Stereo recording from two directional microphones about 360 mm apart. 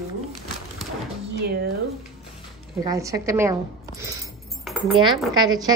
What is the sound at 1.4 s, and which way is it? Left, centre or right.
Speech, right.